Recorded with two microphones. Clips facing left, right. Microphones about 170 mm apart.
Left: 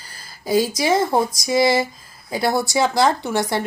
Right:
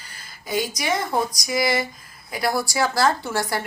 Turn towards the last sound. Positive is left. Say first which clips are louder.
# left 4 dB
turn(degrees=20)  # may be behind; listen again after turning